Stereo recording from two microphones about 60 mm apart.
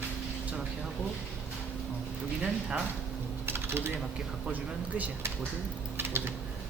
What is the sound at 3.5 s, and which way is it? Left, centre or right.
Typing, right.